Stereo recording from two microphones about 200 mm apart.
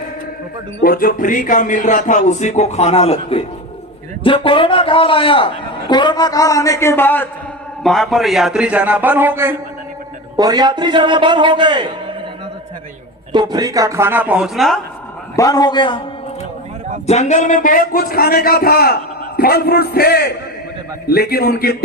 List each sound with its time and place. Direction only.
0.8 s a man's voice: 45° left (ahead or behind); by 11.9 s 25° right (ahead or behind)
13.3 s a man's voice: 20° right (ahead or behind); by 14.8 s centre (ahead or behind)
15.4 s a man's voice: 20° left (ahead or behind)
17.1 s a man's voice: 35° left (ahead or behind)